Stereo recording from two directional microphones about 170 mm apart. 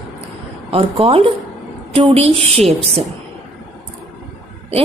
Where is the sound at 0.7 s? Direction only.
35° right (ahead or behind).